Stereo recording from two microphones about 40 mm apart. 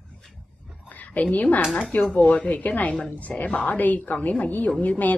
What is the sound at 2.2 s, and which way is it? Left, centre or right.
A woman's voice, left.